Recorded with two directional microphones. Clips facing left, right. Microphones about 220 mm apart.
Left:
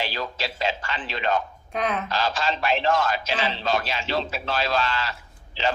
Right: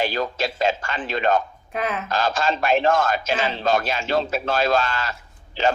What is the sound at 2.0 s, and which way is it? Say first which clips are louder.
A man's voice: right 3 dB; 50° right (ahead or behind).